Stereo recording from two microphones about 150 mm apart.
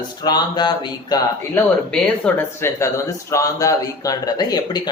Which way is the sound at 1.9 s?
10° left (ahead or behind).